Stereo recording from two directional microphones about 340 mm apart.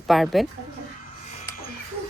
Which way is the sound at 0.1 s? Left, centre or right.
Centre.